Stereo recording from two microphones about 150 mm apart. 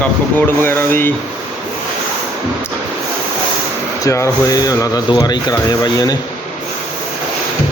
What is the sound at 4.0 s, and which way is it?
Speech, 20° left (ahead or behind).